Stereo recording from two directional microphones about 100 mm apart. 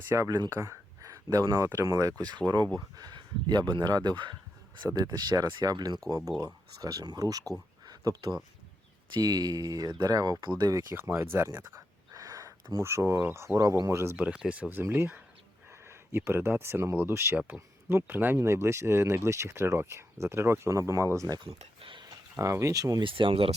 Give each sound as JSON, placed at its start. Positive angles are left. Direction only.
{"t": 0.1, "sound": "speech", "side_deg": -30}
{"t": 7.9, "sound": "a sound", "side_deg": -40}
{"t": 9.1, "sound": "speech", "side_deg": -40}
{"t": 10.9, "sound": "speech", "side_deg": -25}
{"t": 12.1, "sound": "a sound", "side_deg": -35}
{"t": 12.8, "sound": "speech", "side_deg": -25}
{"t": 14.2, "sound": "speech", "side_deg": -10}
{"t": 14.7, "sound": "speech", "side_deg": -25}
{"t": 21.3, "sound": "a sound", "side_deg": -60}
{"t": 22.4, "sound": "speech", "side_deg": -30}
{"t": 23.0, "sound": "speech", "side_deg": -60}